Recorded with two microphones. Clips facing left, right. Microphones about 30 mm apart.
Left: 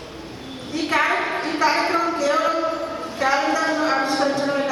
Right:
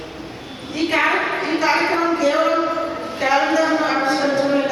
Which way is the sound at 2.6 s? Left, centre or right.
Right.